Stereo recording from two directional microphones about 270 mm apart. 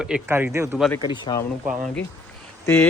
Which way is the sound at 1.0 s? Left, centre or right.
Centre.